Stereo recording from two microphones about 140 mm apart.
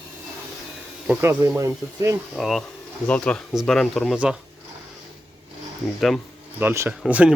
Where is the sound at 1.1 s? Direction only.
20° right (ahead or behind).